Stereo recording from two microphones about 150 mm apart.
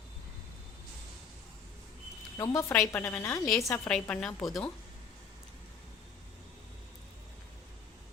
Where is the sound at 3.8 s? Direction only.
5° left (ahead or behind).